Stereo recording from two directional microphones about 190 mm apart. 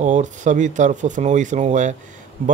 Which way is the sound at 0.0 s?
40° right (ahead or behind).